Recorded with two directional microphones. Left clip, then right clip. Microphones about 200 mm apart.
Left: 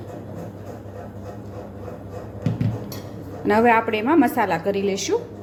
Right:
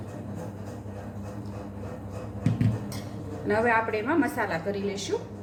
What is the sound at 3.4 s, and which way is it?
A woman's voice, 45° left (ahead or behind).